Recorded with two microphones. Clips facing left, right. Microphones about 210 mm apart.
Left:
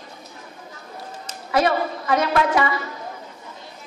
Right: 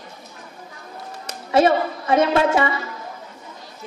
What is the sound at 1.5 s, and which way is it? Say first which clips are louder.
A woman's voice: right 4 dB; 25° right (ahead or behind).